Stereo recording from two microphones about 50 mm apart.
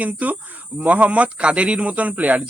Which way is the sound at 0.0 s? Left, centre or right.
Right.